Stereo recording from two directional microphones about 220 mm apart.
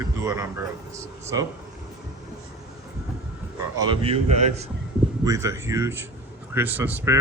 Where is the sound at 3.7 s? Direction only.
20° right (ahead or behind).